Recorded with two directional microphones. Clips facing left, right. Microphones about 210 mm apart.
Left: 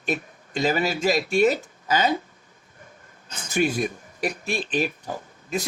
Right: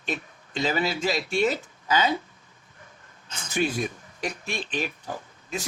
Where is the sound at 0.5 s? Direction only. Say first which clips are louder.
Left 3 dB; 45° left (ahead or behind).